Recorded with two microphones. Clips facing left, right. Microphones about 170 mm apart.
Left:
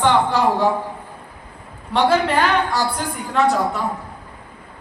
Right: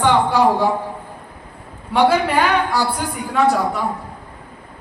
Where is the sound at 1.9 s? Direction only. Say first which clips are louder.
Right 2 dB; 10° right (ahead or behind).